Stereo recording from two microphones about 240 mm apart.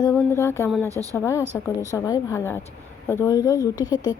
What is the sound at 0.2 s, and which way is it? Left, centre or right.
A woman's voice, centre.